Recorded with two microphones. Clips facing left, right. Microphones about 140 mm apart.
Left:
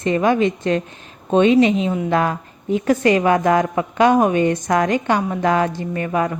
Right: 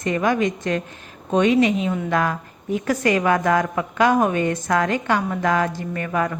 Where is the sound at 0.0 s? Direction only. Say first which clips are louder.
Left 4 dB; 25° left (ahead or behind).